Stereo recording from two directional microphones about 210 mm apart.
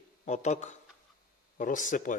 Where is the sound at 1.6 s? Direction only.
40° left (ahead or behind).